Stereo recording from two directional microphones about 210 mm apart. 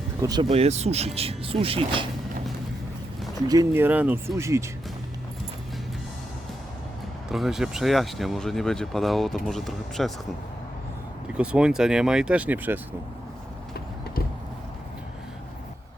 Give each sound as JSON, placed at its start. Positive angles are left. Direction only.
{"t": 0.2, "sound": "speech", "side_deg": -15}
{"t": 0.4, "sound": "speech", "side_deg": -30}
{"t": 3.5, "sound": "speech", "side_deg": -15}
{"t": 7.3, "sound": "speech", "side_deg": 0}
{"t": 11.3, "sound": "speech", "side_deg": -5}